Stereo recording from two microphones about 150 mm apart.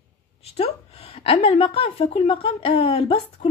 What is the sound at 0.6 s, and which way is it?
A woman's voice, 40° left (ahead or behind).